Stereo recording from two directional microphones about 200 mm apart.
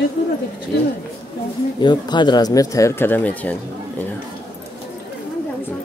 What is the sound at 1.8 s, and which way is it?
Speech, 20° left (ahead or behind).